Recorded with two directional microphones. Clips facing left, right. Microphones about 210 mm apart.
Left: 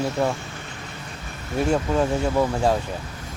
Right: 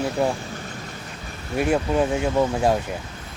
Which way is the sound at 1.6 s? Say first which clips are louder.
Right 1 dB; 5° right (ahead or behind).